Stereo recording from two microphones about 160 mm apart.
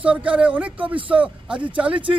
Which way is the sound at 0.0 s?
10° right (ahead or behind).